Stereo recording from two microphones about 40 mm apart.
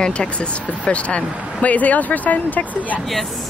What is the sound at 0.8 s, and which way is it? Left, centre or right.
Speech, left.